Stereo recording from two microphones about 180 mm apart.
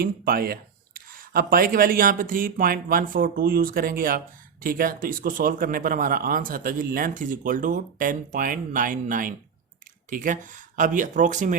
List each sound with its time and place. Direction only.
0.0 s speech: 55° right (ahead or behind)